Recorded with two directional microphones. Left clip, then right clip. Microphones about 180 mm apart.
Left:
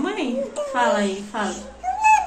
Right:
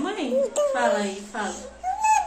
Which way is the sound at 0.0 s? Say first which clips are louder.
Left 3 dB; 10° right (ahead or behind).